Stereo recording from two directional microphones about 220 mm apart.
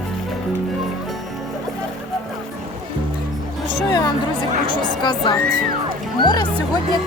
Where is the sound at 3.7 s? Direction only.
20° left (ahead or behind).